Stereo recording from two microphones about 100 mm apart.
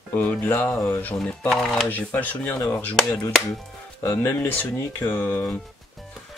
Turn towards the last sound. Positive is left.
turn(degrees=20)  # may be behind; listen again after turning